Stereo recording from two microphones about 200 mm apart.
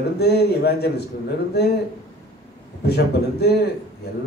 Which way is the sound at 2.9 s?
55° left (ahead or behind).